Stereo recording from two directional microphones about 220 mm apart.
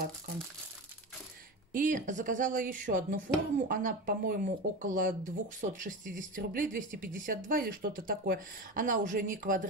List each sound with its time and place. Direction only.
1.7 s speech: 35° right (ahead or behind)